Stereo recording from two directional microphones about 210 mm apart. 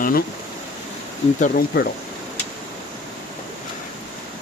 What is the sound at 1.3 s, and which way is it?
Speech, 40° left (ahead or behind).